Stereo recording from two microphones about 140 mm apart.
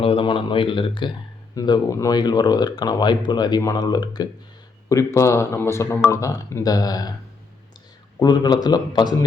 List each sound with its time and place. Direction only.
0.0 s speech: 40° left (ahead or behind)
8.2 s speech: 30° left (ahead or behind)